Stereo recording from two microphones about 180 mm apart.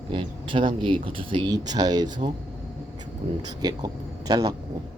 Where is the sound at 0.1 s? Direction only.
30° right (ahead or behind).